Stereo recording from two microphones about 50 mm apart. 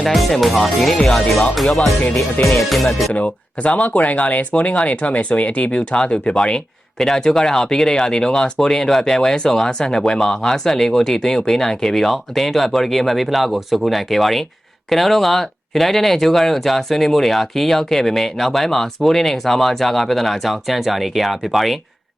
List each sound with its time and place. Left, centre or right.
0.0 s speech: centre
3.1 s speech: left; by 21.8 s centre